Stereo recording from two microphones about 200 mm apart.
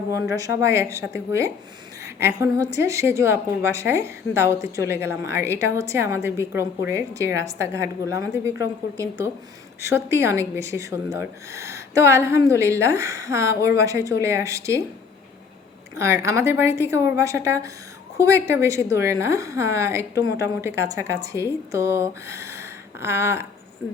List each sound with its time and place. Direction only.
0.1 s a woman's voice: 15° right (ahead or behind)
2.0 s a woman's voice: 15° right (ahead or behind)
16.0 s a woman's voice: 15° right (ahead or behind)